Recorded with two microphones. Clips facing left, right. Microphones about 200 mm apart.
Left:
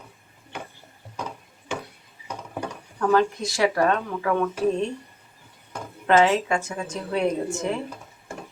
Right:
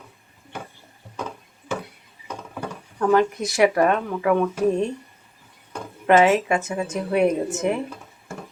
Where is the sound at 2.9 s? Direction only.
20° right (ahead or behind).